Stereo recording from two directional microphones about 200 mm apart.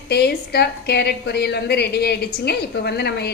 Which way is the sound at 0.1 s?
55° left (ahead or behind).